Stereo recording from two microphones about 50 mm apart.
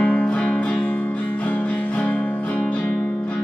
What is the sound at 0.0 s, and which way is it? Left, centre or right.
Music, left.